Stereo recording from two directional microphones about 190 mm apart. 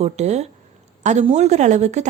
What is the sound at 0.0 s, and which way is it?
Speech, 35° right (ahead or behind).